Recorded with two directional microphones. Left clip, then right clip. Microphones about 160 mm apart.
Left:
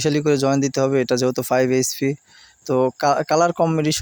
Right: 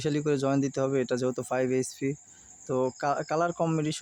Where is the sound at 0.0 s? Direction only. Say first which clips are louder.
Left 9 dB; 40° left (ahead or behind).